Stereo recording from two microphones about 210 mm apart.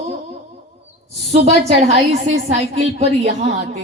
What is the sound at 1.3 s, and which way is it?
A woman's voice, 30° right (ahead or behind).